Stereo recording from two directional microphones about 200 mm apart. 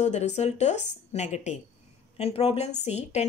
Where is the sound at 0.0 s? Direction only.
35° left (ahead or behind).